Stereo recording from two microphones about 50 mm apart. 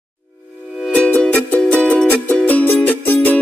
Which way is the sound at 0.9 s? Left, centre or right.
Left.